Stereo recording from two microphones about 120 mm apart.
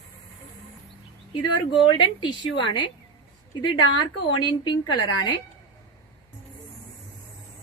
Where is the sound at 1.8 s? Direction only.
40° left (ahead or behind).